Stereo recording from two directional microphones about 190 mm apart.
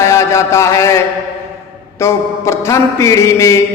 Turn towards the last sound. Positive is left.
turn(degrees=15)  # may be behind; listen again after turning